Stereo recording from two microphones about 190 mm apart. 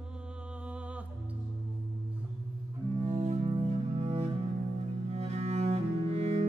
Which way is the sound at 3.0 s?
35° right (ahead or behind).